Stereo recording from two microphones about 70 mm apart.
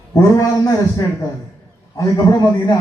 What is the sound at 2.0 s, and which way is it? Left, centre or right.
Speech, left.